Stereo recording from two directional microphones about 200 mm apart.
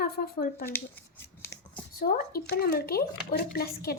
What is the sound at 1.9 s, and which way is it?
A woman's voice, 50° left (ahead or behind).